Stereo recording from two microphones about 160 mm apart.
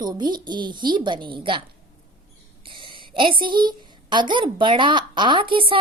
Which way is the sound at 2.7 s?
30° right (ahead or behind).